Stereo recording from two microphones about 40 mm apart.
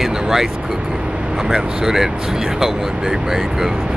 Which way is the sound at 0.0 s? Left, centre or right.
Centre.